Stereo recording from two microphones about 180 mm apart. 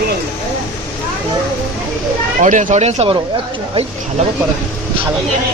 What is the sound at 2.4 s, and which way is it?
Speech, 45° right (ahead or behind).